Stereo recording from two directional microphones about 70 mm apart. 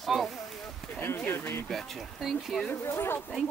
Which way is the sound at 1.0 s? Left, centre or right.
Left.